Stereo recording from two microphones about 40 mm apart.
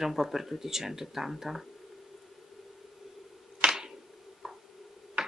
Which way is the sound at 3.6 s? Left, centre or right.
Centre.